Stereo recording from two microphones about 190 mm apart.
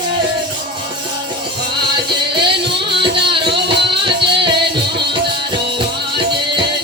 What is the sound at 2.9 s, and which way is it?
Music, 25° right (ahead or behind).